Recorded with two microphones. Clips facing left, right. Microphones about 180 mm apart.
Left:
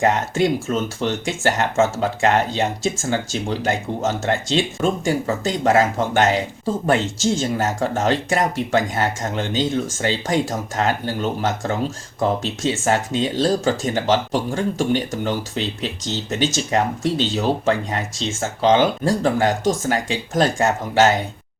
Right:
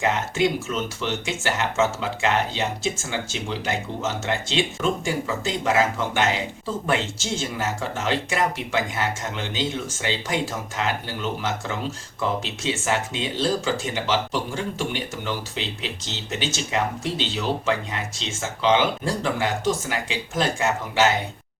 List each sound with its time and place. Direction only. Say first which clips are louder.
0.0 s speech: left 4 dB; 45° left (ahead or behind)